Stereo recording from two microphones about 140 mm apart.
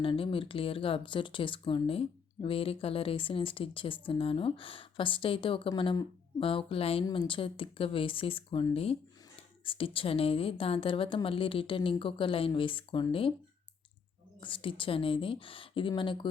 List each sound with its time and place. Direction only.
0.0 s speech: 40° left (ahead or behind)
14.4 s speech: 40° left (ahead or behind)